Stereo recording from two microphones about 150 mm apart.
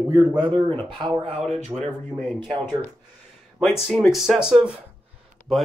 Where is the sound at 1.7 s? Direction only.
15° right (ahead or behind).